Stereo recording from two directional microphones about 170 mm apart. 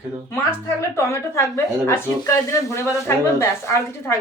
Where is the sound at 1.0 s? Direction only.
15° left (ahead or behind).